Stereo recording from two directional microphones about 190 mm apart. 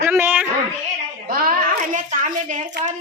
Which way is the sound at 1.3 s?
50° right (ahead or behind).